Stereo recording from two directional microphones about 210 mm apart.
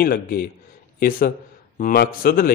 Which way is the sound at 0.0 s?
45° left (ahead or behind).